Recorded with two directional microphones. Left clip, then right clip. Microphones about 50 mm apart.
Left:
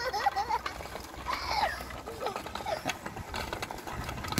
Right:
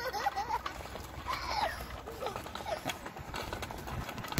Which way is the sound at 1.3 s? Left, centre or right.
Left.